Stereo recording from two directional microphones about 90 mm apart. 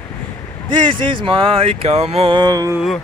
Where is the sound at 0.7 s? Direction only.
70° right (ahead or behind); by 2.4 s 90° right.